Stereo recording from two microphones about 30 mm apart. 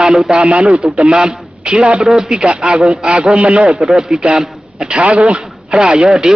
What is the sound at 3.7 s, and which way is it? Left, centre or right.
A man's voice, centre.